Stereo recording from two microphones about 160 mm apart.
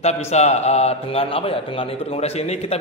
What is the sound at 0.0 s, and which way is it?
A man's voice, 45° left (ahead or behind).